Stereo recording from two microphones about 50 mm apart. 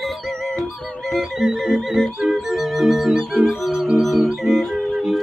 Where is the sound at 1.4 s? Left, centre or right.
Centre.